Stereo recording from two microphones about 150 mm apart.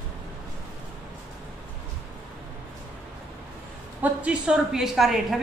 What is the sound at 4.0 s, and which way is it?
A woman's voice, 5° right (ahead or behind).